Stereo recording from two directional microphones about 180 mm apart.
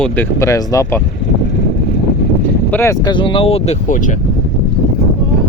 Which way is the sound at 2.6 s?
15° left (ahead or behind).